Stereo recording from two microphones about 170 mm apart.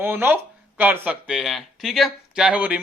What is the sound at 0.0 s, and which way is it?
Speech, 10° right (ahead or behind).